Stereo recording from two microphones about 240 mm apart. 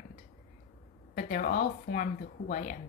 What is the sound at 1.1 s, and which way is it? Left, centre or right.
Speech, left.